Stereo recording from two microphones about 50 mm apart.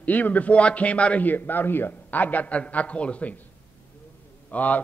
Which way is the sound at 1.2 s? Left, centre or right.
Left.